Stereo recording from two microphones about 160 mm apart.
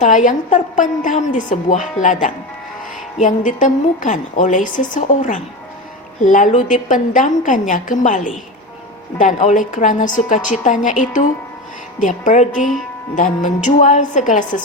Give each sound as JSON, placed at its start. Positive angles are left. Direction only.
{"t": 0.0, "sound": "a woman's voice", "side_deg": 50}